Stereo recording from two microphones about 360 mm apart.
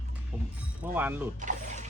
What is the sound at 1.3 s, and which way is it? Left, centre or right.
Mechanisms, centre.